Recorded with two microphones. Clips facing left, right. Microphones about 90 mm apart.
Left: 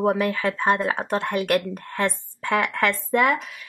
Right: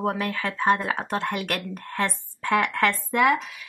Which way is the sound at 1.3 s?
35° left (ahead or behind).